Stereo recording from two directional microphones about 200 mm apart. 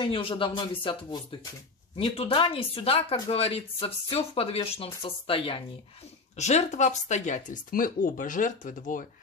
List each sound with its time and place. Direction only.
0.0 s speech: 25° left (ahead or behind); by 9.0 s 40° left (ahead or behind)